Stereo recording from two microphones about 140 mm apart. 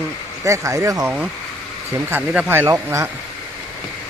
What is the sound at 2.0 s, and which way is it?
Speech, 10° right (ahead or behind).